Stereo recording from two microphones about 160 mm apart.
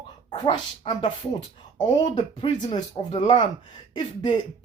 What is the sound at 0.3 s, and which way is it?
Speech, 30° left (ahead or behind).